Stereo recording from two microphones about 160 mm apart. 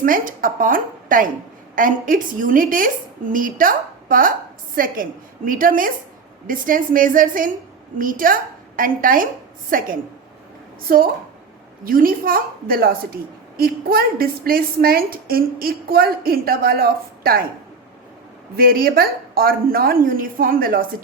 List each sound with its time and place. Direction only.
0.0 s a woman's voice: 60° right (ahead or behind)
18.5 s a woman's voice: 70° right (ahead or behind)